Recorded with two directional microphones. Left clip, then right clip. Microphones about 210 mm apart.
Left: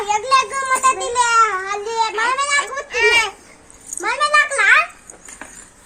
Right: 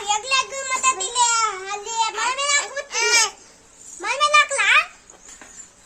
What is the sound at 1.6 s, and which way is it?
Child singing, 40° right (ahead or behind).